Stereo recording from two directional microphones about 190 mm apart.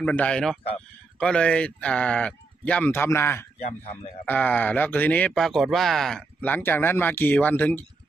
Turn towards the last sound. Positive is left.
turn(degrees=10)  # may be behind; listen again after turning